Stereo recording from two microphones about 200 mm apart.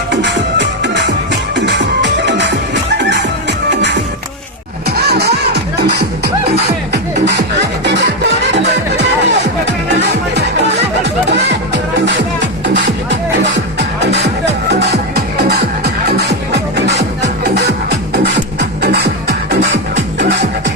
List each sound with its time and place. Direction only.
0.1 s music: 60° right (ahead or behind)
18.8 s music: 55° right (ahead or behind)